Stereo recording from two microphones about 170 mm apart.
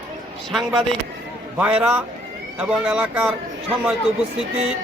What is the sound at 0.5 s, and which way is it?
A man's voice, centre (ahead or behind).